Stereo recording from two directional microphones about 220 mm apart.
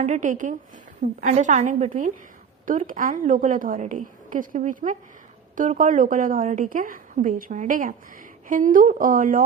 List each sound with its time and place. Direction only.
0.0 s a woman's voice: 35° right (ahead or behind)